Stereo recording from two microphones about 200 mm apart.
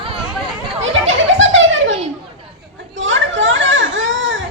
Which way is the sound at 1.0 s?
70° right (ahead or behind).